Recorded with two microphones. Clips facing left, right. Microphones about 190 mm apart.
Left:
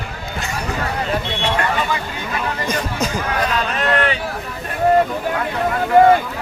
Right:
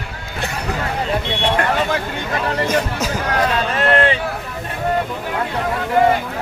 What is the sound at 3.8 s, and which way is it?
Speech, 30° right (ahead or behind).